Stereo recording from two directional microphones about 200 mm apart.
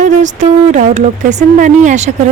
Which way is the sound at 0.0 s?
40° right (ahead or behind).